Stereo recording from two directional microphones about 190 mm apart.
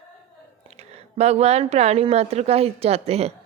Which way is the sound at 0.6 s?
35° right (ahead or behind).